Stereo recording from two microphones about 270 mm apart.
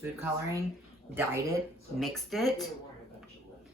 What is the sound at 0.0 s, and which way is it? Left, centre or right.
Speech, centre.